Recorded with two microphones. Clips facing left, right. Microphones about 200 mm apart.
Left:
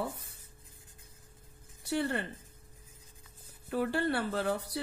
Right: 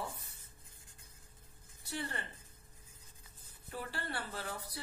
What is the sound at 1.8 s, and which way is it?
Speech, 70° left (ahead or behind).